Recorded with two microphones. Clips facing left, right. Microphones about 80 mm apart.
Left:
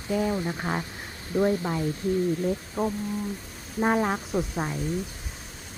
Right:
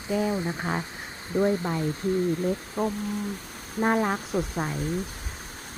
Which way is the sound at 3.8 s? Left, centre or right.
Centre.